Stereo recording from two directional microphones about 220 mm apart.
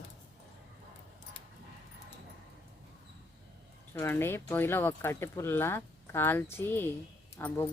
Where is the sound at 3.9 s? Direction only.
10° left (ahead or behind).